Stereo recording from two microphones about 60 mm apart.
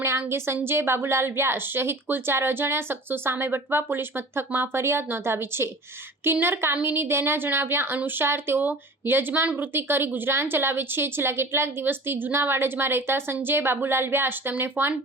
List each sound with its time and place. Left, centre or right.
0.0 s a woman's voice: right